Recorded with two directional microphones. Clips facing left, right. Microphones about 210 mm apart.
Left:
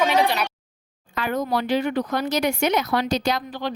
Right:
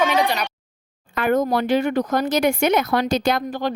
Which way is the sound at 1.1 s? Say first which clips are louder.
Right 5 dB; 55° right (ahead or behind).